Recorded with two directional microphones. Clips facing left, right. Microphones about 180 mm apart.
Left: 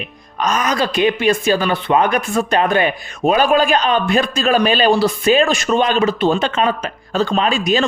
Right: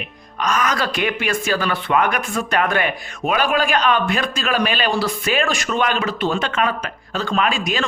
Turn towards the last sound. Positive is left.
turn(degrees=25)  # may be behind; listen again after turning